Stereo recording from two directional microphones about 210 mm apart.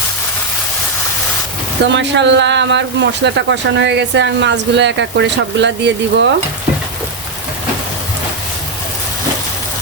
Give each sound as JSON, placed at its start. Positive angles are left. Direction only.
{"t": 1.8, "sound": "speech", "side_deg": -55}